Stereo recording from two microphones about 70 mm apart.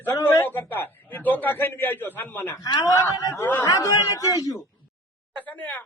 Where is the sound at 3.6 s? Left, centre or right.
Left.